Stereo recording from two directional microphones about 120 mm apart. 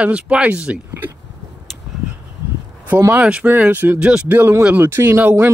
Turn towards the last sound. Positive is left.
turn(degrees=-20)  # may be behind; listen again after turning